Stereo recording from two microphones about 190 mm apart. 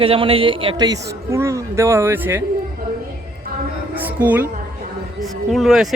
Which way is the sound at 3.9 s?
10° right (ahead or behind).